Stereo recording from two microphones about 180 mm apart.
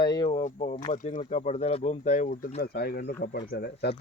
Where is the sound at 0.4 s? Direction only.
40° left (ahead or behind).